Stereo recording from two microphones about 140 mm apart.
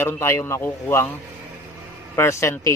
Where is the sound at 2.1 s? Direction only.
20° left (ahead or behind).